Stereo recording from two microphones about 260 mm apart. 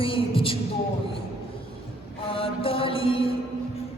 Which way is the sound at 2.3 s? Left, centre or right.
Left.